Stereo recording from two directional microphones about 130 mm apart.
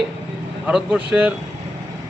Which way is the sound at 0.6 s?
5° right (ahead or behind).